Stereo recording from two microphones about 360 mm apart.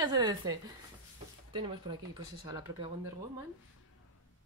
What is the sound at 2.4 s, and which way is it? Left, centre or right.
Speech, centre.